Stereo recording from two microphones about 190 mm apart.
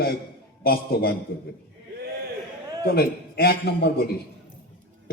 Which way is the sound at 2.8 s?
55° left (ahead or behind).